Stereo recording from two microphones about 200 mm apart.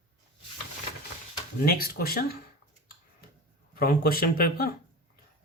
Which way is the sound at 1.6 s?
50° left (ahead or behind).